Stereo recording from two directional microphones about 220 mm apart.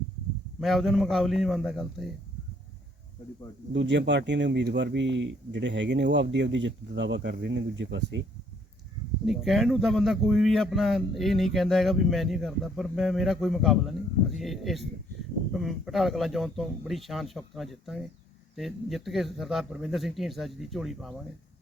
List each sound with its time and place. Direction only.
0.6 s speech: centre (ahead or behind)
3.7 s speech: 55° right (ahead or behind)
9.2 s speech: centre (ahead or behind)